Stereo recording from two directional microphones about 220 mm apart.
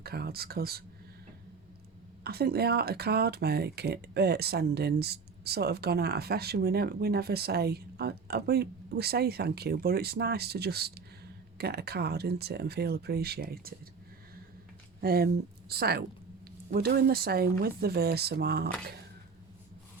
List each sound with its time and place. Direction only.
0.0 s speech: 45° right (ahead or behind)
2.2 s speech: 45° right (ahead or behind)
15.0 s speech: 45° right (ahead or behind)